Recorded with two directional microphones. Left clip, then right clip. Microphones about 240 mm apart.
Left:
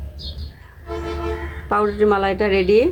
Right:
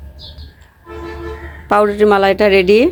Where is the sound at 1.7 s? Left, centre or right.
Right.